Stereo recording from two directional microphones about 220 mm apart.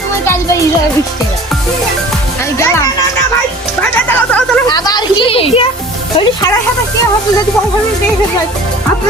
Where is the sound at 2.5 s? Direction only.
10° left (ahead or behind).